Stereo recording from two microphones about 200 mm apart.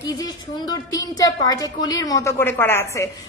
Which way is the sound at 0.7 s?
20° left (ahead or behind).